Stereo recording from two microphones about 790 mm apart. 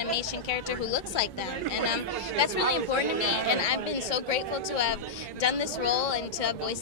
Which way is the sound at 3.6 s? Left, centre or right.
Left.